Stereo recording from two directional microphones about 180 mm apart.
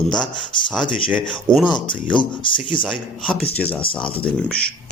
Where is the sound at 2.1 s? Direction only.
25° left (ahead or behind).